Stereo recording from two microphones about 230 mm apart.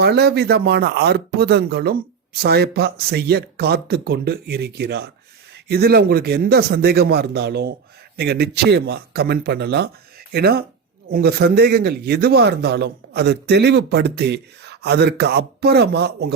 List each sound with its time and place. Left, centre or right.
0.0 s speech: right